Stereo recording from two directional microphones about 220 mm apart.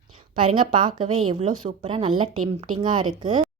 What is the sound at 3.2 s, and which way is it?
Speech, 20° right (ahead or behind).